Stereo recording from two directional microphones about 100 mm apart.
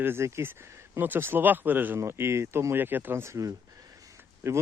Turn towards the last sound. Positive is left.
turn(degrees=-25)  # may be behind; listen again after turning